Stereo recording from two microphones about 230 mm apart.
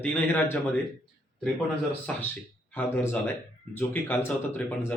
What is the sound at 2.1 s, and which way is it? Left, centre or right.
Speech, centre.